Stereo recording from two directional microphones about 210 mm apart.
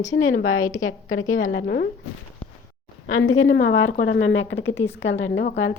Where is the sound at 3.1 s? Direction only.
85° left.